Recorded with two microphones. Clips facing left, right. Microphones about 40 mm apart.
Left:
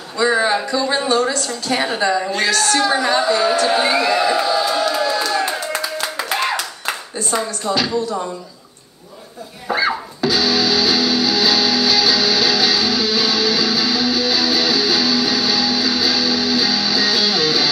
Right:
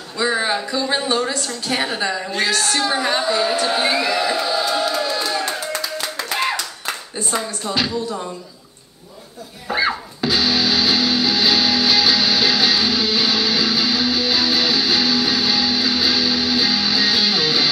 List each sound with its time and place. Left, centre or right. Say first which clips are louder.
0.2 s a sound: left 4 dB; centre
0.7 s a woman's voice: left 2 dB; centre
5.7 s clapping: left 2 dB; centre
7.7 s a woman's voice: left 4 dB; centre
9.7 s music: left 1 dB; centre
10.2 s music: left 1 dB; centre